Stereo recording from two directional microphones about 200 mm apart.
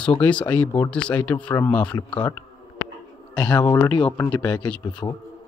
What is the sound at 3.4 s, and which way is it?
Speech, 20° left (ahead or behind).